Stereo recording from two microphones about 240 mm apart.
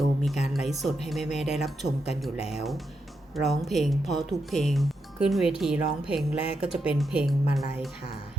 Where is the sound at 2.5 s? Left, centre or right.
Centre.